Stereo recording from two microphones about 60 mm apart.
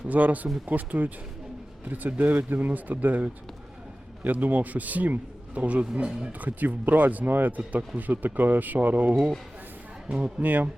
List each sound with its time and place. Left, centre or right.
0.1 s speech: right
6.4 s speech: right
10.1 s speech: centre
10.4 s speech: right